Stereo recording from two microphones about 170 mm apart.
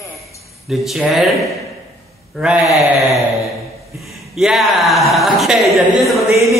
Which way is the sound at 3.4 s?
Centre (ahead or behind).